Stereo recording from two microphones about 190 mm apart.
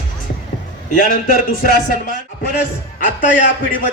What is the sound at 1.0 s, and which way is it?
Speech, 50° left (ahead or behind).